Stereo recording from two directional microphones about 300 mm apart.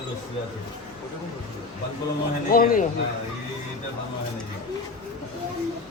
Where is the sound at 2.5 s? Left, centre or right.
Left.